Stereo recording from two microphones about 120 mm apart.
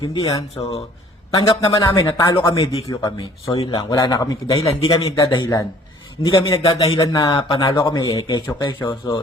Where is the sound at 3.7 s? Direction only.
30° left (ahead or behind).